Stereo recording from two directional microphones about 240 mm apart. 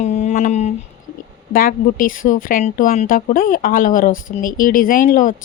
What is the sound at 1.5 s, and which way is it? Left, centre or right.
Speech, left.